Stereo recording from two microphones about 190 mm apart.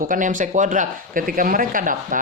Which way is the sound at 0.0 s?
45° right (ahead or behind).